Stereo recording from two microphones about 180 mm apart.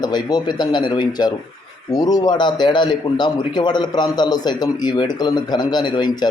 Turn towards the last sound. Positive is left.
turn(degrees=25)  # may be behind; listen again after turning